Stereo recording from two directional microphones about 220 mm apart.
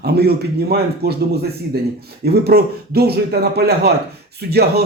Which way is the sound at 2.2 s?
45° right (ahead or behind).